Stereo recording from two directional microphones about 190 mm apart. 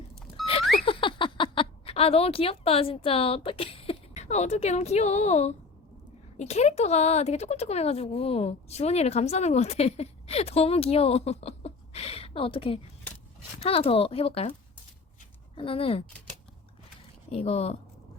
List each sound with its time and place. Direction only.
0.6 s a sound: centre (ahead or behind)
0.9 s speech: 25° left (ahead or behind)
15.5 s speech: 30° left (ahead or behind)
17.3 s speech: 30° left (ahead or behind)